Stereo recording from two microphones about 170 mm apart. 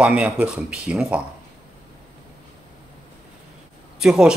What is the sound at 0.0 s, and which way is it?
Speech, 5° right (ahead or behind).